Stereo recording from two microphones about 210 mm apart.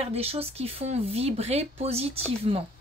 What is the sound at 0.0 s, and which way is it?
Speech, 30° right (ahead or behind).